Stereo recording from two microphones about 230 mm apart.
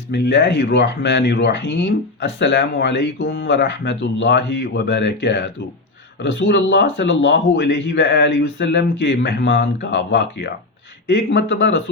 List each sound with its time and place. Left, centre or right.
0.1 s speech: left